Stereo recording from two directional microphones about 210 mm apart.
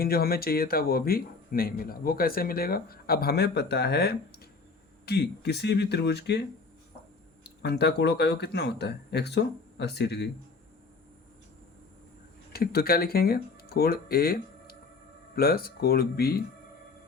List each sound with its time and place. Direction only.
0.0 s speech: 45° left (ahead or behind)
7.6 s speech: 50° left (ahead or behind)
12.5 s speech: 45° left (ahead or behind)